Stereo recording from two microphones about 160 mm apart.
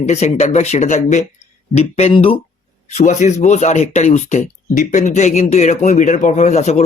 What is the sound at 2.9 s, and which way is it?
Speech, 50° left (ahead or behind).